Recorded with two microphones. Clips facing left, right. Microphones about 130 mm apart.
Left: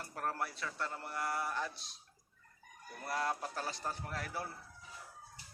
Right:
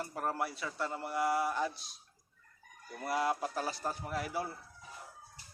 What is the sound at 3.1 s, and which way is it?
A man's voice, 10° right (ahead or behind).